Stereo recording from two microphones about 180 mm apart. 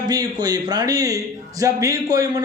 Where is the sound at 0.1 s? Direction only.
20° right (ahead or behind).